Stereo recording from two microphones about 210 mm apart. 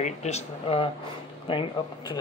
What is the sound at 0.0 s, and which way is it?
Speech, 30° left (ahead or behind).